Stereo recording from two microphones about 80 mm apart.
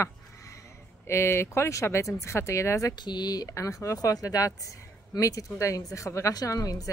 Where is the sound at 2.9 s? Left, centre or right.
Left.